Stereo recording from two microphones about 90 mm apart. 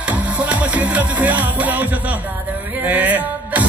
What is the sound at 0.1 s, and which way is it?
Music, 15° right (ahead or behind).